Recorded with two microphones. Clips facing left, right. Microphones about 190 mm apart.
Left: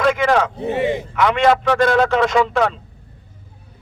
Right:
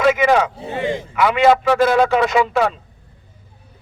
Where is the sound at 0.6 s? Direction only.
20° left (ahead or behind).